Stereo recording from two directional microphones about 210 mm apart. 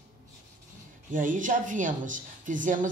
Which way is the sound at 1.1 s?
40° right (ahead or behind).